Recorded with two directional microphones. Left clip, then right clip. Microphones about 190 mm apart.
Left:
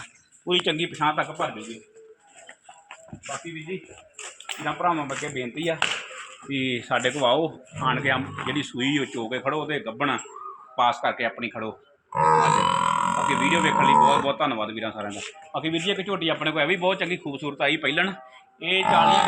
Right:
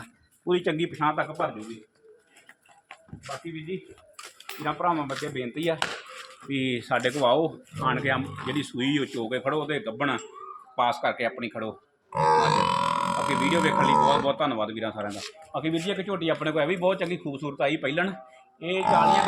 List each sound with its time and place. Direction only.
0.0 s a sound: 25° right (ahead or behind)
1.0 s speech: 15° right (ahead or behind)
4.6 s speech: 5° right (ahead or behind)
6.5 s speech: centre (ahead or behind)
12.1 s grunt: 20° left (ahead or behind)
13.4 s speech: 15° right (ahead or behind)
13.8 s speech: 20° left (ahead or behind)
14.3 s speech: 10° right (ahead or behind)
16.4 s a man's voice: 35° right (ahead or behind); by 18.2 s 50° right (ahead or behind)
18.8 s speech: 10° right (ahead or behind)